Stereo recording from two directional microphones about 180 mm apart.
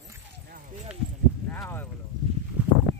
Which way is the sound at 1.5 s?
10° left (ahead or behind).